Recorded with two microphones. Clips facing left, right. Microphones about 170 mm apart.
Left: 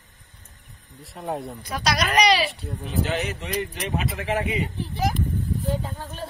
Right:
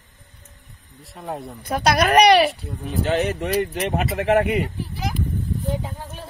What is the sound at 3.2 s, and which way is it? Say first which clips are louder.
A child's voice: right 7 dB; 55° right (ahead or behind).